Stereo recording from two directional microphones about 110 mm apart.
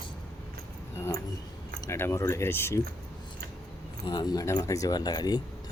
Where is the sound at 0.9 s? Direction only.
25° left (ahead or behind).